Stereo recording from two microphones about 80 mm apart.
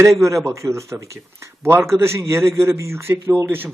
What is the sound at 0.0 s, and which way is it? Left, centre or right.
A man's voice, right.